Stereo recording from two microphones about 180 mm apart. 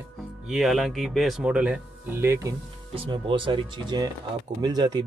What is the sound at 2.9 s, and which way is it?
Speech, 30° right (ahead or behind).